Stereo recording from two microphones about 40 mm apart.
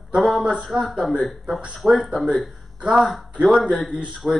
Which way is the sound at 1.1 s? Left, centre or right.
Centre.